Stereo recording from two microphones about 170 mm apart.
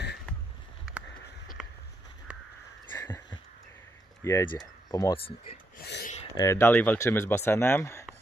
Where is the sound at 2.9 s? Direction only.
15° left (ahead or behind).